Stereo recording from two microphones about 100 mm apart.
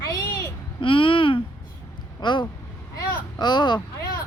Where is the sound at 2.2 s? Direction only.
50° left (ahead or behind).